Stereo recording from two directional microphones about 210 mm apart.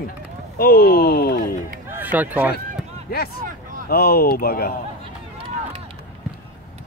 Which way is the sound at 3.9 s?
45° left (ahead or behind).